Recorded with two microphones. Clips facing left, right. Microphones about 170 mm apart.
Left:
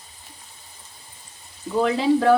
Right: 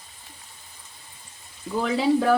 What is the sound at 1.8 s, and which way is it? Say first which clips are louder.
Speech: left 2 dB; centre (ahead or behind).